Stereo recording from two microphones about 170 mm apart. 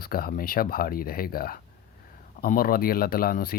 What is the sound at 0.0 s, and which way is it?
Speech, 60° left (ahead or behind).